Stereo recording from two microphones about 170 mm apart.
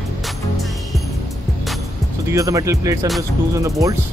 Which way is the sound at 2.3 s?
20° right (ahead or behind).